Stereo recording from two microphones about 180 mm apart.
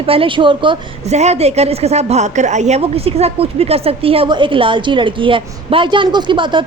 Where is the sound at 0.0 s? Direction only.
30° right (ahead or behind).